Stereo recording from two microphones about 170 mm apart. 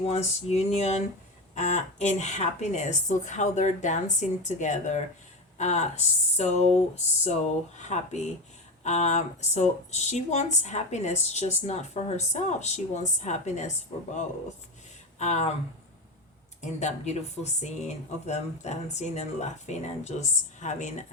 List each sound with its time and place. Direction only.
0.1 s speech: 40° left (ahead or behind)
15.2 s speech: 45° left (ahead or behind)
16.6 s speech: 45° left (ahead or behind)